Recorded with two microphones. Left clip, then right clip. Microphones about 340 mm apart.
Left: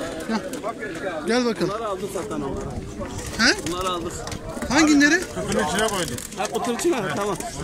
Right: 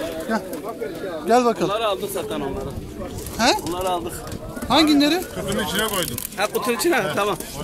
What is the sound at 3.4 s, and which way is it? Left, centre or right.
Speech, centre.